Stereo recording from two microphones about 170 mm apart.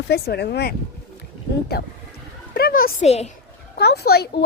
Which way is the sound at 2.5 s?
60° left (ahead or behind).